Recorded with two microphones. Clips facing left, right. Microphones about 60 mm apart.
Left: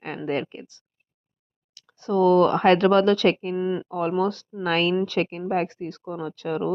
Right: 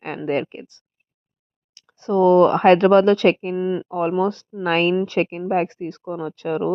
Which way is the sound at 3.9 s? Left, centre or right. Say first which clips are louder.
Right 4 dB; right.